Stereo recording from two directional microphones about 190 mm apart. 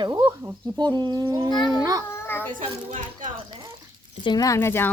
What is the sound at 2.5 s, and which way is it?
Speech, 40° right (ahead or behind).